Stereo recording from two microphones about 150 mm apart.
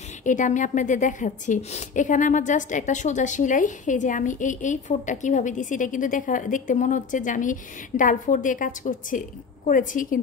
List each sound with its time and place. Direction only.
0.2 s a woman's voice: 55° left (ahead or behind)